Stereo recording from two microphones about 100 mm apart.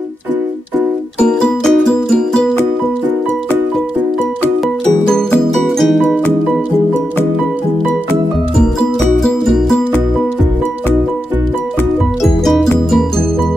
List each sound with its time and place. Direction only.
1.2 s music: 5° left (ahead or behind)
5.5 s music: centre (ahead or behind)
9.2 s music: centre (ahead or behind)